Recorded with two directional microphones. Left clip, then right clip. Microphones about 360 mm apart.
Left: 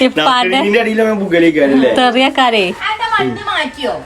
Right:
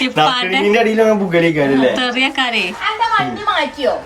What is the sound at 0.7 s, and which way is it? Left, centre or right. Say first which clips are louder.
Speech: even; right.